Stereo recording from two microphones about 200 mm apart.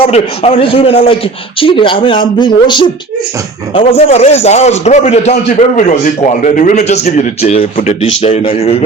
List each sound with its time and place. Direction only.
0.0 s a man's voice: 30° left (ahead or behind)